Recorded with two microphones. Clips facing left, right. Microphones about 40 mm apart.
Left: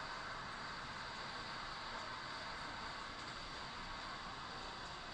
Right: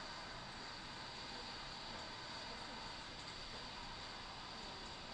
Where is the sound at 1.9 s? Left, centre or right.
Left.